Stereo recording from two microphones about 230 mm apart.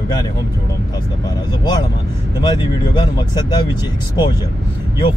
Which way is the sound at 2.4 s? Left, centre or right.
Centre.